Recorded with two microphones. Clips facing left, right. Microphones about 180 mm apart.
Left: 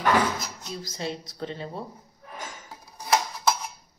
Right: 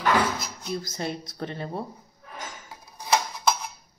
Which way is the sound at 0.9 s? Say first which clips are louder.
Right 1 dB; 55° right (ahead or behind).